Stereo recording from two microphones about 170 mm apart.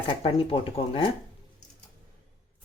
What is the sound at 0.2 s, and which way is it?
Speech, 30° left (ahead or behind).